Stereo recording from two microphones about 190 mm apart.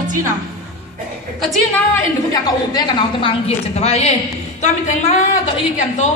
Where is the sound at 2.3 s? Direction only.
25° left (ahead or behind); by 5.3 s 40° left (ahead or behind).